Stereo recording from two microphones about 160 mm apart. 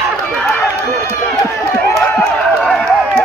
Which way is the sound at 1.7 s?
5° left (ahead or behind).